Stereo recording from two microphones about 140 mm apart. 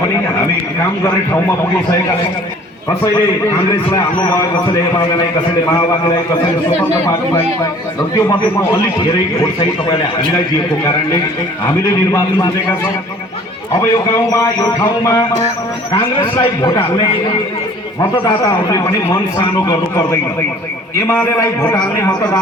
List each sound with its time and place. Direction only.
8.1 s a man's voice: 25° left (ahead or behind)
14.3 s a man's voice: 25° left (ahead or behind)
15.9 s a man's voice: 35° left (ahead or behind)
18.3 s a man's voice: 25° left (ahead or behind)
21.6 s a man's voice: 10° left (ahead or behind)